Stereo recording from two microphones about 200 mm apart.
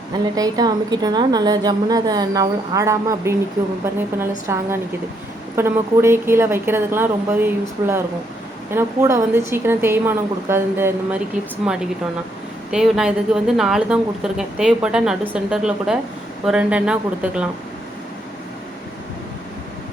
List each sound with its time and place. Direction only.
0.3 s a woman's voice: 20° right (ahead or behind)
12.7 s speech: 5° right (ahead or behind)